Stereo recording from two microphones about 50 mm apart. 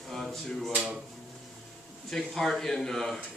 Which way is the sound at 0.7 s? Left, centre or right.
Right.